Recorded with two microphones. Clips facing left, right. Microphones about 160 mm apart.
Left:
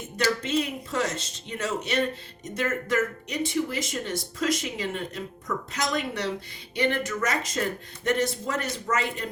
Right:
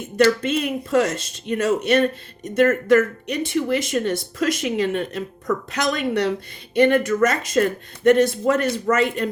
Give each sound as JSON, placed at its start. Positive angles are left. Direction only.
{"t": 0.2, "sound": "a woman's voice", "side_deg": -55}
{"t": 6.7, "sound": "speech", "side_deg": -55}